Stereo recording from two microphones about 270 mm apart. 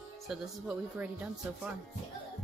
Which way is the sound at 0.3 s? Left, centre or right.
Centre.